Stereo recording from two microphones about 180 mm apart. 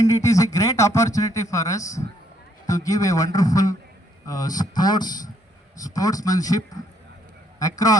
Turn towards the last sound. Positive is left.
turn(degrees=20)  # may be behind; listen again after turning